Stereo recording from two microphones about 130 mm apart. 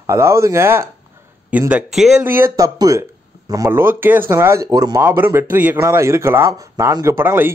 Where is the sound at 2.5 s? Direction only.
25° right (ahead or behind).